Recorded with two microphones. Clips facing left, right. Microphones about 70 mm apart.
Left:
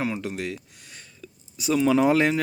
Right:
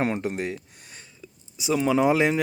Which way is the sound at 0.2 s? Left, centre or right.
Right.